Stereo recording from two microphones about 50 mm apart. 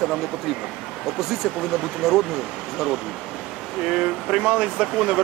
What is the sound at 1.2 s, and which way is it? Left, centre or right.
Speech, centre.